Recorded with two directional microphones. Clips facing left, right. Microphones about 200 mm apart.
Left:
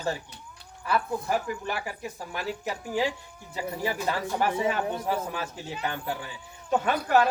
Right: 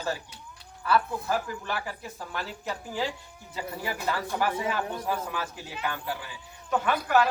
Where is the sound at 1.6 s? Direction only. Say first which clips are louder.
Left 1 dB; 15° left (ahead or behind).